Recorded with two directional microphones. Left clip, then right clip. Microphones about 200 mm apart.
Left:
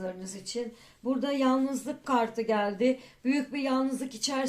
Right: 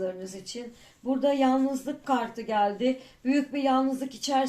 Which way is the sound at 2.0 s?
30° left (ahead or behind).